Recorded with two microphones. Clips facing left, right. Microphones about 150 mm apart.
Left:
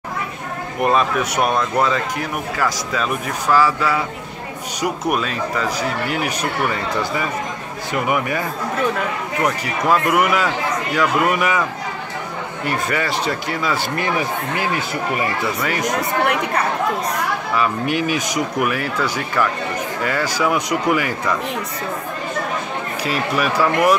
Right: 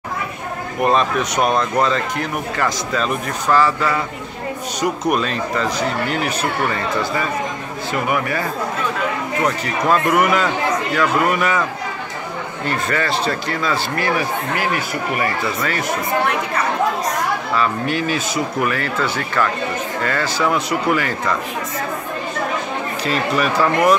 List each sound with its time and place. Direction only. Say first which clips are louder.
0.8 s speech: right 1 dB; 10° left (ahead or behind)
12.6 s speech: right 1 dB; 10° left (ahead or behind)
17.6 s speech: left 1 dB; 15° left (ahead or behind)
23.0 s speech: right 1 dB; 5° left (ahead or behind)